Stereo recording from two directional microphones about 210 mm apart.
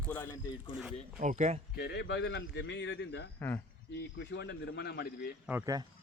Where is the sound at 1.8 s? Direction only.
50° left (ahead or behind).